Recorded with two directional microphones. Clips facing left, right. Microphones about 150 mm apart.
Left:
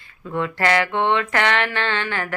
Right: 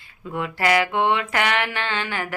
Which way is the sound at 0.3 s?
10° right (ahead or behind).